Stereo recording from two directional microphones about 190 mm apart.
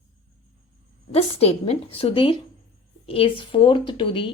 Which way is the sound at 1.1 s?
35° left (ahead or behind).